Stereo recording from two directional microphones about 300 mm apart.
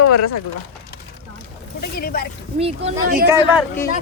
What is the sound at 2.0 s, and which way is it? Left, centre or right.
Speech, left.